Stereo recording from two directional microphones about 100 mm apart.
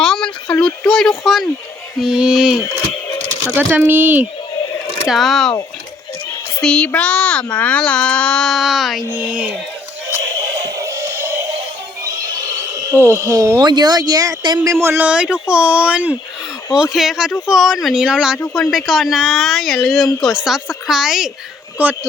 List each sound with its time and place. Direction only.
0.0 s a sound: 5° left (ahead or behind)
2.0 s speech: 5° right (ahead or behind)
5.0 s a woman's voice: centre (ahead or behind)
6.6 s a child's voice: 10° left (ahead or behind)
9.1 s speech: 15° right (ahead or behind)
10.5 s music: 50° right (ahead or behind)
10.8 s music: 30° right (ahead or behind)
12.0 s neigh: 35° right (ahead or behind)
13.7 s speech: 40° right (ahead or behind)
14.7 s speech: 25° right (ahead or behind)
15.0 s a woman's voice: 10° right (ahead or behind)
21.8 s speech: 15° right (ahead or behind)